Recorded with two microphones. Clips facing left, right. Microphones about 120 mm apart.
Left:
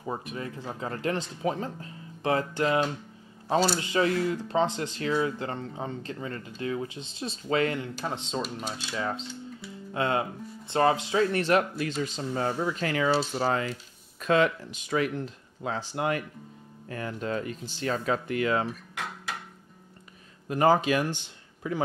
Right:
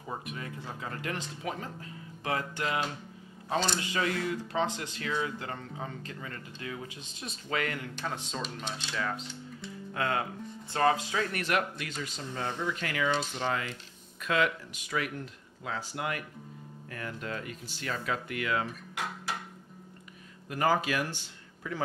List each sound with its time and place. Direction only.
0.1 s speech: 30° left (ahead or behind)
8.4 s speech: 10° left (ahead or behind)
8.9 s speech: 25° left (ahead or behind)
20.4 s speech: 25° left (ahead or behind)